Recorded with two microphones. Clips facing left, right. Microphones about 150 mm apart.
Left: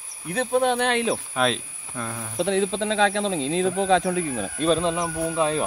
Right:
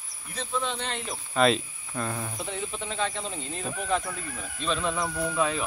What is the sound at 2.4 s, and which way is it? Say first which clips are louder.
Speech: left 12 dB; 90° left.